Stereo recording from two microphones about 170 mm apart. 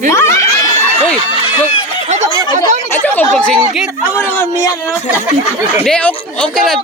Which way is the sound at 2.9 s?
10° left (ahead or behind).